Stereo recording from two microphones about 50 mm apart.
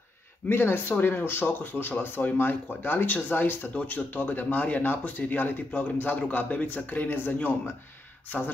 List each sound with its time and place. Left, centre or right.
0.5 s speech: left